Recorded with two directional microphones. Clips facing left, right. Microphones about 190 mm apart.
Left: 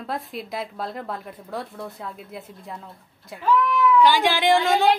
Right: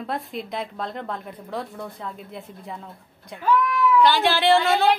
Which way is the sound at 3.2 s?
Centre (ahead or behind).